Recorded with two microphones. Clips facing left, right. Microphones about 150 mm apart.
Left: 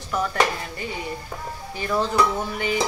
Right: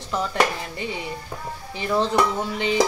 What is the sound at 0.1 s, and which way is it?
Dishes, 20° right (ahead or behind).